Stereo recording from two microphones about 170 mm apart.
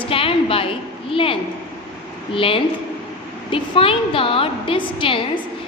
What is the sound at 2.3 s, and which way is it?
A woman's voice, 30° left (ahead or behind).